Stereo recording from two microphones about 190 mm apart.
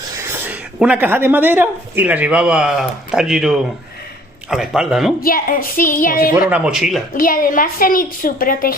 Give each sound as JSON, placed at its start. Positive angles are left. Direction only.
{"t": 0.4, "sound": "speech", "side_deg": -10}
{"t": 5.2, "sound": "a woman's voice", "side_deg": 50}
{"t": 6.5, "sound": "speech", "side_deg": -5}
{"t": 7.1, "sound": "a woman's voice", "side_deg": 50}